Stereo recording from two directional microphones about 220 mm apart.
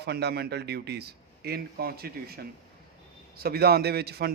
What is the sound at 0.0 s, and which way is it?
A man's voice, 50° right (ahead or behind).